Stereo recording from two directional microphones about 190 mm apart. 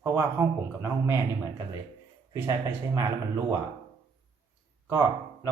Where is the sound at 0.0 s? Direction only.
15° right (ahead or behind).